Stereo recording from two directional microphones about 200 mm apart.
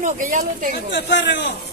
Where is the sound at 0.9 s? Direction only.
60° left (ahead or behind).